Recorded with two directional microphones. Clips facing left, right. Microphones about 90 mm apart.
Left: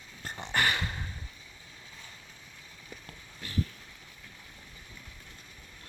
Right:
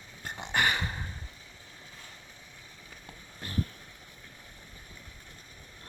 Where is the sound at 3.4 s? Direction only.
45° right (ahead or behind).